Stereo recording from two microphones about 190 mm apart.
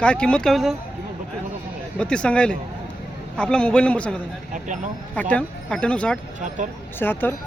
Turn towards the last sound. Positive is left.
turn(degrees=10)  # may be behind; listen again after turning